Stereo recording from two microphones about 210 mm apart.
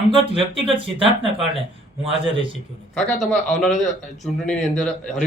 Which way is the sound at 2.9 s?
Centre (ahead or behind).